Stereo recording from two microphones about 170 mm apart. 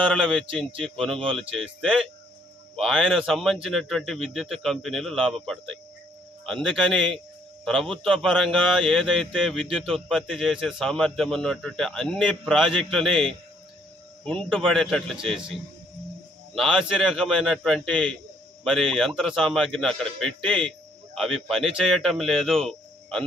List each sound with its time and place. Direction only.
0.1 s a man's voice: 5° left (ahead or behind)
1.4 s speech: 35° right (ahead or behind)
1.8 s a man's voice: 5° left (ahead or behind)
16.5 s a man's voice: centre (ahead or behind)